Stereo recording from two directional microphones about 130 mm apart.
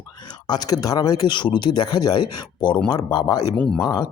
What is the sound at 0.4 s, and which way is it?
Speech, 30° left (ahead or behind).